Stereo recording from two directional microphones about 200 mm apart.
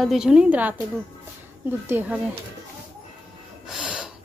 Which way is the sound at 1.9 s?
10° right (ahead or behind).